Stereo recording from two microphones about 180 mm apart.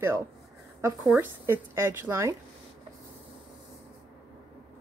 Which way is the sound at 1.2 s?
15° right (ahead or behind).